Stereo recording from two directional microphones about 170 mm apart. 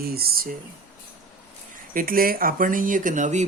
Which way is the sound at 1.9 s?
55° right (ahead or behind).